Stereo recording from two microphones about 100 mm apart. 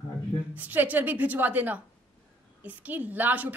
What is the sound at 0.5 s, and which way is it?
A woman's voice, 15° right (ahead or behind).